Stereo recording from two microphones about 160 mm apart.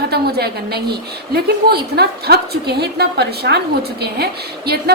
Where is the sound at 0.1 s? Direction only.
85° right.